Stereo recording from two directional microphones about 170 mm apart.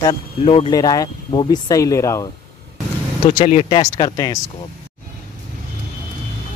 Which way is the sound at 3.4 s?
40° left (ahead or behind).